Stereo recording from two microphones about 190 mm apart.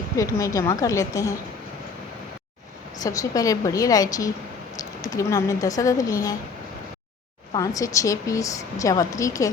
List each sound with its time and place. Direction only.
0.2 s a woman's voice: 15° left (ahead or behind)
3.0 s a woman's voice: 20° left (ahead or behind)
7.5 s a woman's voice: 15° left (ahead or behind)